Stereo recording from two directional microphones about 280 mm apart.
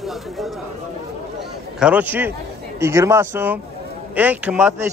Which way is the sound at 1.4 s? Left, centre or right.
Centre.